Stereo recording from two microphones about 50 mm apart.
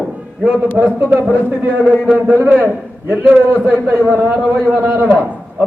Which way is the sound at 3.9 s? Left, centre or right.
Right.